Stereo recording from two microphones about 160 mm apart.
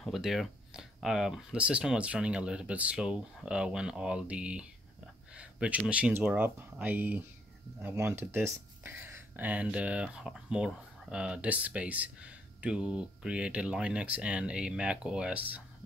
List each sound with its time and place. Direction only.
0.0 s speech: centre (ahead or behind)